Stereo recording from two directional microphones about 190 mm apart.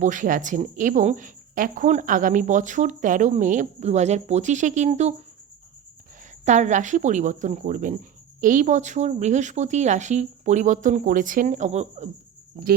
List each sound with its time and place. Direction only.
0.0 s speech: 40° right (ahead or behind)
6.4 s speech: 40° right (ahead or behind)